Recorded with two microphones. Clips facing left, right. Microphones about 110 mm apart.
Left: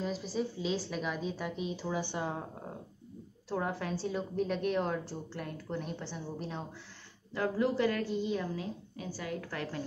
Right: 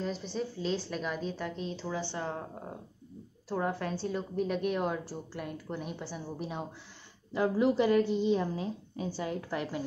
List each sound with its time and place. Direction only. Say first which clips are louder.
0.0 s a woman's voice: even; 5° left (ahead or behind)
3.4 s a woman's voice: right 2 dB; centre (ahead or behind); by 9.8 s 20° right (ahead or behind)